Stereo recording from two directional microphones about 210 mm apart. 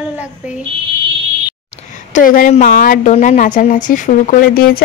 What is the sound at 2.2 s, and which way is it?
A woman's voice, 40° left (ahead or behind).